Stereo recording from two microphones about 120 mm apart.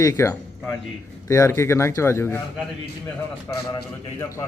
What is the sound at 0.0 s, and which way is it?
A man's voice, 25° left (ahead or behind).